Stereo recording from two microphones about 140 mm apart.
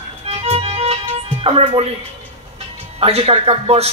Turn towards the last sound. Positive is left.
turn(degrees=-45)  # may be behind; listen again after turning